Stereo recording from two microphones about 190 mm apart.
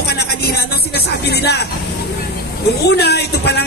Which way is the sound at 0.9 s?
60° left (ahead or behind).